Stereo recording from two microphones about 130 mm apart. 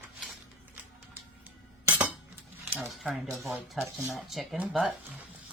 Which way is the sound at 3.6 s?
20° right (ahead or behind).